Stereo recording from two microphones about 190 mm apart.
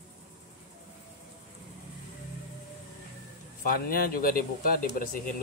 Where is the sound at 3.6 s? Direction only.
50° left (ahead or behind).